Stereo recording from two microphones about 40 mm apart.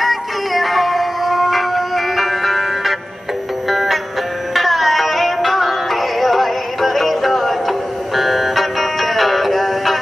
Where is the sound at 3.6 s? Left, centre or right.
Centre.